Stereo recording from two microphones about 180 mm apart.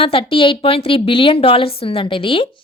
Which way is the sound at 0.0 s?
30° left (ahead or behind).